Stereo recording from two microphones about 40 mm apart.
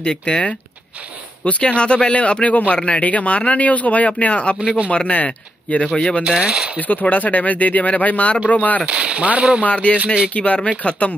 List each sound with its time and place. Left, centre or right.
0.0 s speech: left
4.6 s speech: right
4.9 s speech: left
5.9 s speech: left
6.2 s speech: right
6.8 s speech: left
8.8 s speech: right
9.7 s speech: left